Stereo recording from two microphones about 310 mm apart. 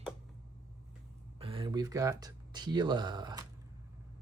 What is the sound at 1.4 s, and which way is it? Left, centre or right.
Speech, centre.